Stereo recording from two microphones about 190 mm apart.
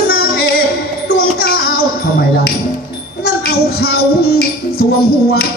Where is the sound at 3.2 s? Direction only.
55° left (ahead or behind).